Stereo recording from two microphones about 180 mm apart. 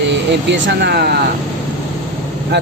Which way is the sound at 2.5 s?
70° right (ahead or behind).